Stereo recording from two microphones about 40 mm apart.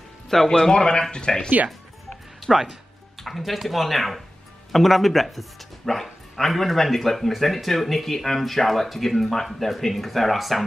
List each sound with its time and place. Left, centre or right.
0.3 s a man's voice: centre
1.7 s music: centre
2.5 s speech: centre
3.3 s speech: centre